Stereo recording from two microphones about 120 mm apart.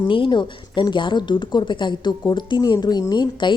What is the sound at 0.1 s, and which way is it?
A woman's voice, 40° left (ahead or behind).